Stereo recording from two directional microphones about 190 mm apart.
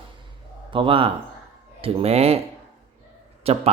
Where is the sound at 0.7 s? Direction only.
25° right (ahead or behind).